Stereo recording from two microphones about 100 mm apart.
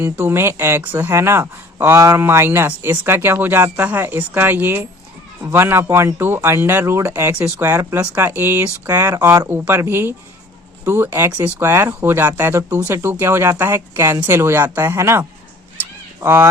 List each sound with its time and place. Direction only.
0.0 s speech: 25° right (ahead or behind)
8.9 s speech: 35° right (ahead or behind)
9.5 s speech: 20° right (ahead or behind)
11.6 s speech: 25° right (ahead or behind)